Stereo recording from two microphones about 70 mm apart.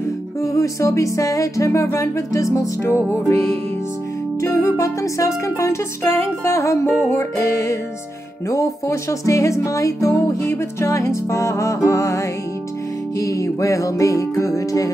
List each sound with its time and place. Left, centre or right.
0.4 s music: left
6.0 s music: left